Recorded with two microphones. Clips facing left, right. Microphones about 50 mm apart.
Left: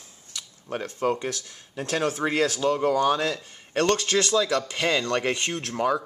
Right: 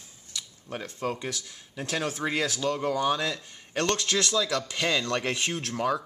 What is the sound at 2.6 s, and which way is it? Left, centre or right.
Speech, centre.